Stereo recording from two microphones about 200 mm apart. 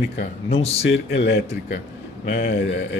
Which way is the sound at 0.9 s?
60° left (ahead or behind).